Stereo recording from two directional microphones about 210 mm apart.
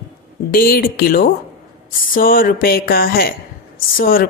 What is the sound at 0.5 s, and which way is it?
Speech, 45° left (ahead or behind).